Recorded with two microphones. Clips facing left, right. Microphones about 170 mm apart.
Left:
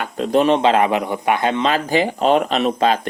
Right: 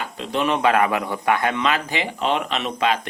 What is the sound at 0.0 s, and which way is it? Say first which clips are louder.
A man's voice: left 7 dB; 45° left (ahead or behind).